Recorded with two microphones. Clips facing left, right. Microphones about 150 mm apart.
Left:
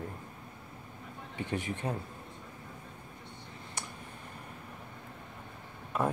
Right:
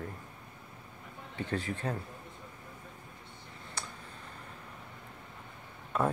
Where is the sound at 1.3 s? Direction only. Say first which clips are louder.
Even; 15° left (ahead or behind).